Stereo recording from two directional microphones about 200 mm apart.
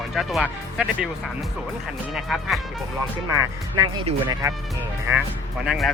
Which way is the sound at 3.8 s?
20° right (ahead or behind).